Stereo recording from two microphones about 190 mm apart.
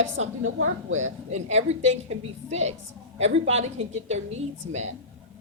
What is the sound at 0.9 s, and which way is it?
A woman's voice, 40° right (ahead or behind).